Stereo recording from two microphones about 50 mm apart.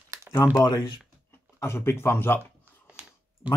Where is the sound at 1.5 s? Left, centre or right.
Left.